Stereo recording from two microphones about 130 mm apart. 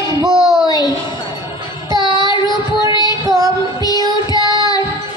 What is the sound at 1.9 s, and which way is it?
Child singing, 35° left (ahead or behind).